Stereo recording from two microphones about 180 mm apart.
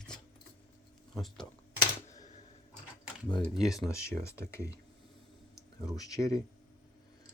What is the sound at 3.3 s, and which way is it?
Speech, centre (ahead or behind).